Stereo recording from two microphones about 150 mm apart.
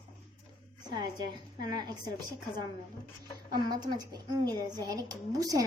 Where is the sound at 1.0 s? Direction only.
25° right (ahead or behind).